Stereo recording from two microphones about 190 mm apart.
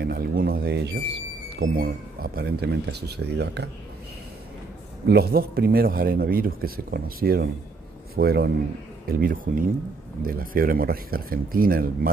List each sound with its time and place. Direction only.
0.0 s speech: 55° right (ahead or behind)
1.6 s speech: 50° right (ahead or behind)
5.0 s speech: 55° right (ahead or behind)